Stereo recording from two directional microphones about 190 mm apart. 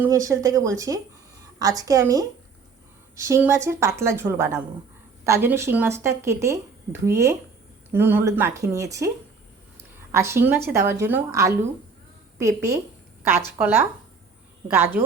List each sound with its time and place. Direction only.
0.0 s a woman's voice: 15° right (ahead or behind)
9.7 s a sound: 15° right (ahead or behind)
10.7 s speech: 15° right (ahead or behind)